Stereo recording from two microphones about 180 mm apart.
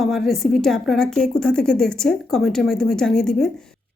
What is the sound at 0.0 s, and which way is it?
A woman's voice, centre (ahead or behind).